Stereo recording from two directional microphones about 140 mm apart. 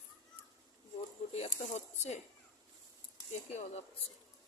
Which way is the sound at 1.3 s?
50° left (ahead or behind).